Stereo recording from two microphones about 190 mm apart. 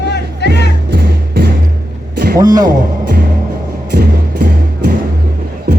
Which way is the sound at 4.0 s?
60° right (ahead or behind).